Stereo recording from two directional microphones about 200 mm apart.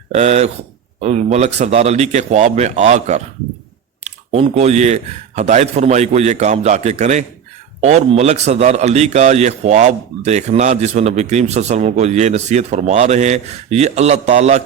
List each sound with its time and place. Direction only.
0.1 s a man's voice: 35° right (ahead or behind)